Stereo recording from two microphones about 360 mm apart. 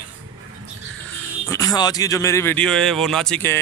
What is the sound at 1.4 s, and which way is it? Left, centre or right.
A man's voice, centre.